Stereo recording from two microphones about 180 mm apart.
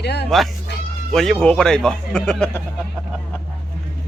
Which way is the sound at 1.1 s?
Centre (ahead or behind).